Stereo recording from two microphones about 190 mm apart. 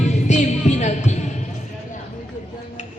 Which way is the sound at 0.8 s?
40° left (ahead or behind).